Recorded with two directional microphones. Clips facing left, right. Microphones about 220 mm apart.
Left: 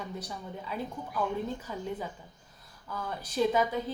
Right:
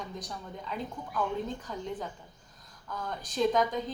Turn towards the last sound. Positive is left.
turn(degrees=10)  # may be behind; listen again after turning